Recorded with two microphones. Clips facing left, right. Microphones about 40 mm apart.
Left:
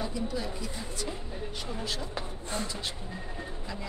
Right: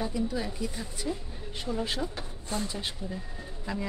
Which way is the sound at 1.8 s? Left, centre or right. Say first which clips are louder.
Right 5 dB; right.